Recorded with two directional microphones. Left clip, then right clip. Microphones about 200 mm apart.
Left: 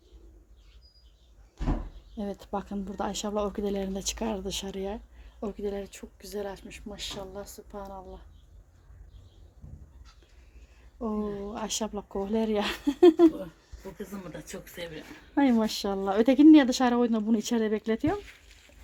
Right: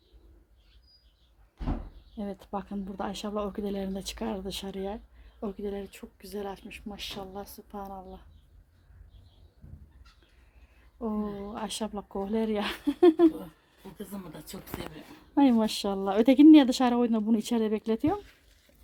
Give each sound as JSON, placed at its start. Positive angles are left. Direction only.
{"t": 2.1, "sound": "speech", "side_deg": 5}
{"t": 10.9, "sound": "speech", "side_deg": 0}
{"t": 14.3, "sound": "speech", "side_deg": -55}
{"t": 15.4, "sound": "speech", "side_deg": -10}